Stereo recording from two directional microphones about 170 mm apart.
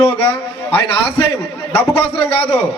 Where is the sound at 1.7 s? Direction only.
35° left (ahead or behind).